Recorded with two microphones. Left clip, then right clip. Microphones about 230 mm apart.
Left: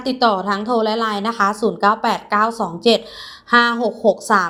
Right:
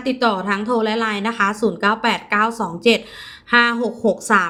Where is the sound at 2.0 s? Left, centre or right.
Centre.